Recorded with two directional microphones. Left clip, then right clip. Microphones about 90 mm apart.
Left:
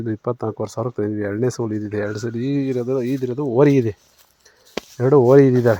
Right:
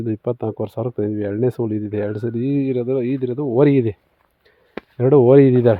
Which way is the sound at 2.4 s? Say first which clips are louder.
Right 1 dB; 45° left (ahead or behind).